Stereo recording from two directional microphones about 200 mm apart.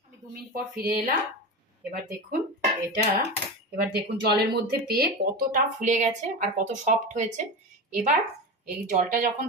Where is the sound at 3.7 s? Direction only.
55° right (ahead or behind); by 7.4 s 35° right (ahead or behind).